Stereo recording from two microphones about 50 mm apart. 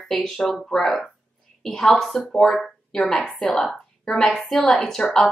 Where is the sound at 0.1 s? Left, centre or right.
Centre.